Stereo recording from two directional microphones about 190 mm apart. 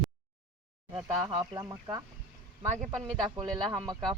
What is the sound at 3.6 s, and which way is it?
Speech, centre (ahead or behind).